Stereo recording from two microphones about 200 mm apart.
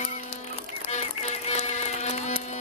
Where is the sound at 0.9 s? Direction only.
35° left (ahead or behind).